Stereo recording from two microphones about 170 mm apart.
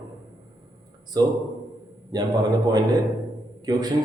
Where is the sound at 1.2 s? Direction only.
25° right (ahead or behind).